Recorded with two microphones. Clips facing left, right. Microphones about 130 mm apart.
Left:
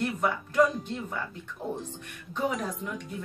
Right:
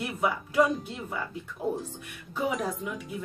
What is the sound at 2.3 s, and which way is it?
Speech, 5° right (ahead or behind).